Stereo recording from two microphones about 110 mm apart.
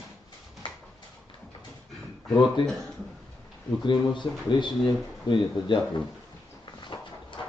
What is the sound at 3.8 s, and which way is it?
A man's voice, 45° left (ahead or behind).